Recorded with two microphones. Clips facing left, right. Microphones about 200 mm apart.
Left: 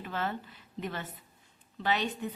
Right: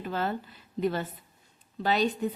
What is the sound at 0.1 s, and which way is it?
A woman's voice, 35° right (ahead or behind).